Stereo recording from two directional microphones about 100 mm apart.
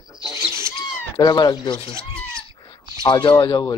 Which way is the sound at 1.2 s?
40° left (ahead or behind).